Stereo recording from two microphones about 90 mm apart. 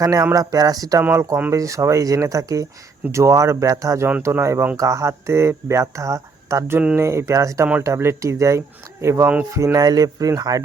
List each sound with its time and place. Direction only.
0.0 s speech: 40° right (ahead or behind)
6.7 s speech: 20° right (ahead or behind)
9.7 s speech: 45° right (ahead or behind)